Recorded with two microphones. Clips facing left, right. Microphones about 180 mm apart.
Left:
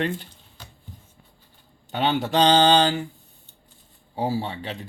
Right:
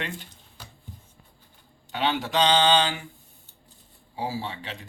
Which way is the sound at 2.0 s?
40° left (ahead or behind).